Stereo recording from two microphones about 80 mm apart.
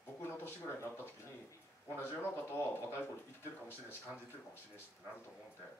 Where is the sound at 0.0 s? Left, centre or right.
Left.